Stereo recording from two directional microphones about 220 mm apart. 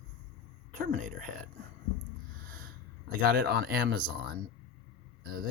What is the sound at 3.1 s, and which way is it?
Speech, 45° right (ahead or behind).